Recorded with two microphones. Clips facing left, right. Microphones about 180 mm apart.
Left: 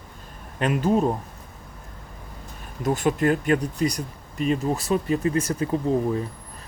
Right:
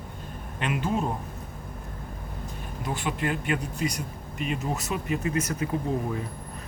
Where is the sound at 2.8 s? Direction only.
45° left (ahead or behind).